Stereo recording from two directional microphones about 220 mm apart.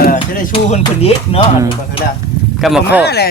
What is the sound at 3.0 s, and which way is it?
Speech, 45° left (ahead or behind).